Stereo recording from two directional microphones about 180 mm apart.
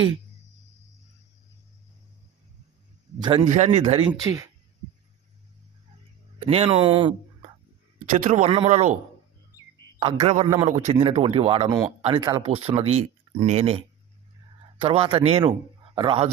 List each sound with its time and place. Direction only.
3.2 s a man's voice: 25° right (ahead or behind)
3.4 s speech: 40° right (ahead or behind)
4.2 s speech: 20° right (ahead or behind)
6.4 s speech: 30° right (ahead or behind)
7.9 s speech: 40° right (ahead or behind)
10.0 s speech: 30° right (ahead or behind)